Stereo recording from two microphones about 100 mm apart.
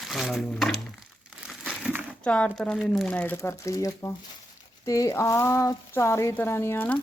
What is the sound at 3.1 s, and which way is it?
Speech, 15° left (ahead or behind).